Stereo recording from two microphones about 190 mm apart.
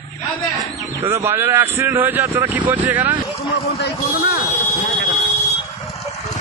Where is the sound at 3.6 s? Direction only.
55° left (ahead or behind).